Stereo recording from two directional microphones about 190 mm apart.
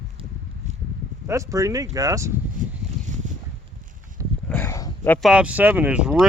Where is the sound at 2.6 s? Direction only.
45° right (ahead or behind).